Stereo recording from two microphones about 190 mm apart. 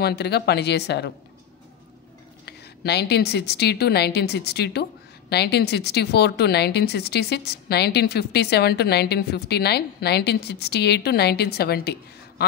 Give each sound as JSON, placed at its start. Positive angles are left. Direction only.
{"t": 0.0, "sound": "speech", "side_deg": 60}
{"t": 2.4, "sound": "speech", "side_deg": 60}